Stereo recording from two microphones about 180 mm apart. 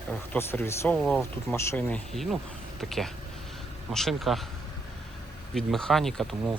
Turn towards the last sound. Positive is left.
turn(degrees=0)  # may be behind; listen again after turning